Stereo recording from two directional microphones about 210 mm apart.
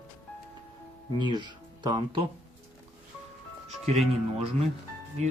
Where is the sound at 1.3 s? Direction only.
20° right (ahead or behind).